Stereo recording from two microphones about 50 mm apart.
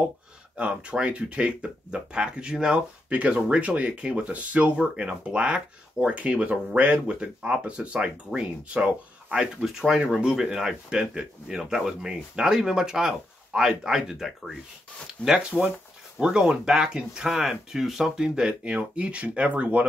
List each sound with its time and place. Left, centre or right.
0.6 s speech: right
15.2 s speech: right